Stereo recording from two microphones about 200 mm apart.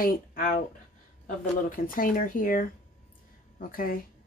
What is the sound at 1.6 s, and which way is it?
Speech, 45° left (ahead or behind).